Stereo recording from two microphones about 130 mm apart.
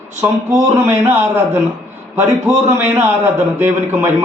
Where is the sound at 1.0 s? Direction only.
20° right (ahead or behind).